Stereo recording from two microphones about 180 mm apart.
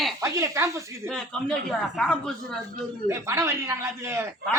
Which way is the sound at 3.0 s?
15° right (ahead or behind).